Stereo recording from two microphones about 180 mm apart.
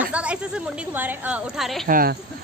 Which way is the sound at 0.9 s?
10° right (ahead or behind).